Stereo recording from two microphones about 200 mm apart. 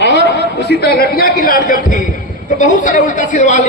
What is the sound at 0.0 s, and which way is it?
A man's voice, 60° left (ahead or behind).